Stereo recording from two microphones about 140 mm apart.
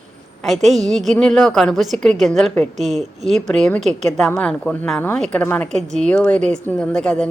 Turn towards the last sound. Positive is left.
turn(degrees=5)  # may be behind; listen again after turning